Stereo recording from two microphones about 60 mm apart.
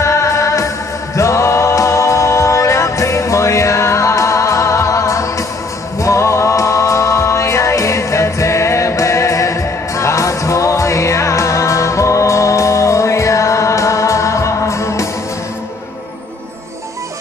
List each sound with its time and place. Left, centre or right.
0.0 s music: left